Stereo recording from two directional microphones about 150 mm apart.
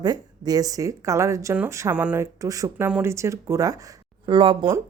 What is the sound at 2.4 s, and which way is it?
A woman's voice, 20° right (ahead or behind).